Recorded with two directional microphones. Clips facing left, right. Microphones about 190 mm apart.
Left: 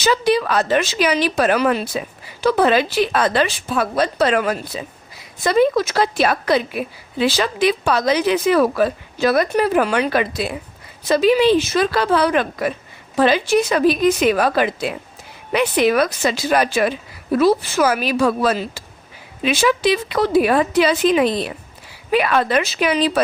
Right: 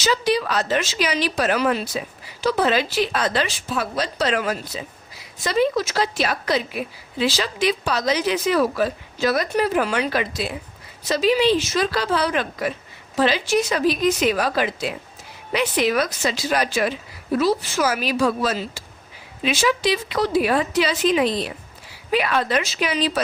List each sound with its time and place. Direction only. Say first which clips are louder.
0.0 s a woman's voice: left 4 dB; 55° left (ahead or behind)